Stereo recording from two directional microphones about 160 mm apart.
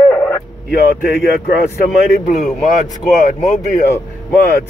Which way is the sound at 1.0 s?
70° left (ahead or behind).